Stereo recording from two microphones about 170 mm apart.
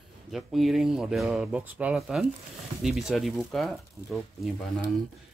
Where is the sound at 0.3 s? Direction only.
Centre (ahead or behind).